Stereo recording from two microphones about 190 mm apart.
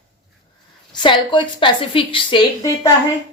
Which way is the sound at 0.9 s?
25° left (ahead or behind).